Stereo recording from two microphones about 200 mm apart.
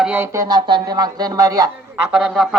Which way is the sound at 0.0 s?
10° right (ahead or behind).